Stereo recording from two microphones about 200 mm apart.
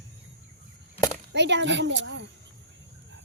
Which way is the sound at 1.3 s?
60° right (ahead or behind).